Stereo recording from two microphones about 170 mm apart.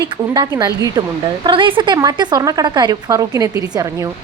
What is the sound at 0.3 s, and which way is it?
A woman's voice, 20° right (ahead or behind).